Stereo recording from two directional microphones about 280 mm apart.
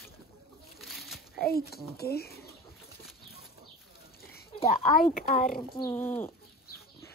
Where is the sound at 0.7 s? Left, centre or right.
Centre.